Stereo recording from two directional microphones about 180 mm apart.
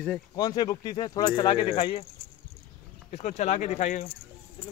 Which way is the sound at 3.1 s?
40° left (ahead or behind).